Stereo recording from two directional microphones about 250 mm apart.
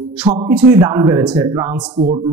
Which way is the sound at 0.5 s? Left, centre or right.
Centre.